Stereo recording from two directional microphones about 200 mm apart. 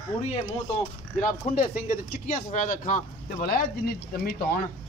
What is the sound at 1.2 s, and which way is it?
Speech, 45° left (ahead or behind).